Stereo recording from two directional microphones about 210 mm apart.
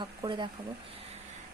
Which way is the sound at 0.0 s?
20° right (ahead or behind).